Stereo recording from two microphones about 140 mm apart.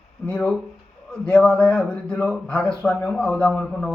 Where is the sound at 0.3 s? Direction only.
5° left (ahead or behind).